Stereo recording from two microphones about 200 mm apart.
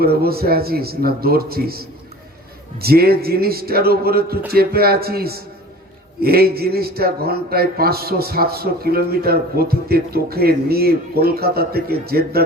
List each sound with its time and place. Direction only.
0.0 s a man's voice: 50° right (ahead or behind)
2.8 s a man's voice: 50° right (ahead or behind)